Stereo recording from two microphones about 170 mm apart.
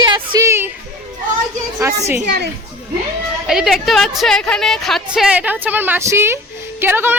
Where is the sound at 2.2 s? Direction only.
75° right (ahead or behind).